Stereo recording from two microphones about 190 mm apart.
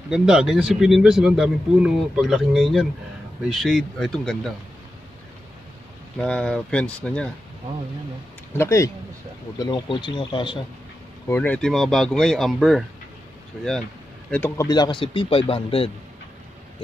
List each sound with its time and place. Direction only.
0.1 s speech: 5° right (ahead or behind)
6.1 s speech: 5° left (ahead or behind)
8.5 s a man's voice: 15° left (ahead or behind)
11.2 s speech: 10° left (ahead or behind)
14.3 s speech: 10° left (ahead or behind)
14.7 s a man's voice: 25° left (ahead or behind)